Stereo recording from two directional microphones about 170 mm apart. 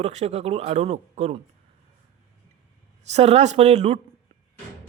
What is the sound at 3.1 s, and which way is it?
Speech, 40° right (ahead or behind).